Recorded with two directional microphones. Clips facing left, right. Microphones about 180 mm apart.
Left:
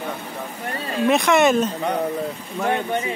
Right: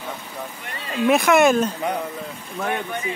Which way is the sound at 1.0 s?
Centre (ahead or behind).